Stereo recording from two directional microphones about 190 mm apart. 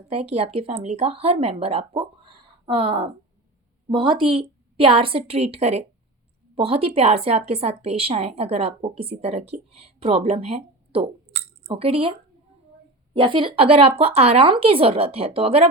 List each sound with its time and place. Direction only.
0.1 s a woman's voice: 35° right (ahead or behind)
13.1 s speech: 25° right (ahead or behind)